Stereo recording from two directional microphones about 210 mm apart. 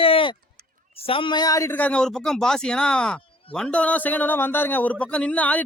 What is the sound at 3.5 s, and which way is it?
Speech, 5° left (ahead or behind).